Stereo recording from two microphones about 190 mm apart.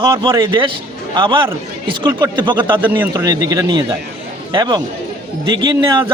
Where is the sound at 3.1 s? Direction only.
20° right (ahead or behind).